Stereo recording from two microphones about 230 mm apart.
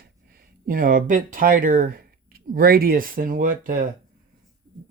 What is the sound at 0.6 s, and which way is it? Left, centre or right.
Speech, right.